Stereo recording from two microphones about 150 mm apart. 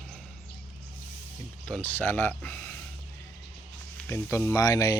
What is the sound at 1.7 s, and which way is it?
Speech, 10° left (ahead or behind).